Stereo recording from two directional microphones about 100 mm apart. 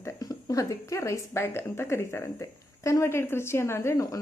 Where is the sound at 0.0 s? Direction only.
40° left (ahead or behind).